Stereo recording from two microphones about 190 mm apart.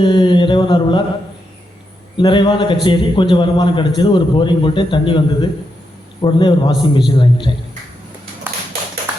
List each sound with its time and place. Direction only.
0.0 s a man's voice: 25° left (ahead or behind)
2.1 s a man's voice: 25° left (ahead or behind)